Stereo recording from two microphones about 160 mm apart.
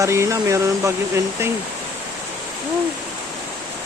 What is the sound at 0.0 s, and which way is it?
Speech, 20° right (ahead or behind).